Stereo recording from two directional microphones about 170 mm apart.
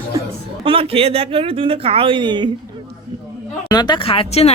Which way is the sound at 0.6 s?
35° right (ahead or behind).